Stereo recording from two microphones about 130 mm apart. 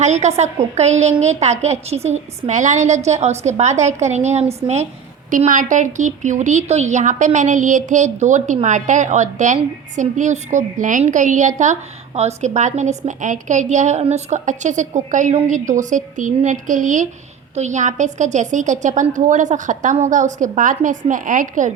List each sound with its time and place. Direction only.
0.0 s a woman's voice: 60° right (ahead or behind)
5.5 s a woman's voice: 80° right
17.5 s a woman's voice: 65° right (ahead or behind); by 21.7 s 85° right